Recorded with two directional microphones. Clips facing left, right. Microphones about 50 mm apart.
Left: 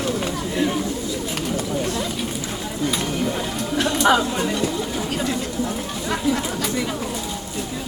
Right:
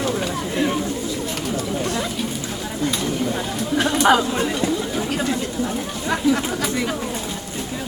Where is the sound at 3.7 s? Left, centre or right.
Centre.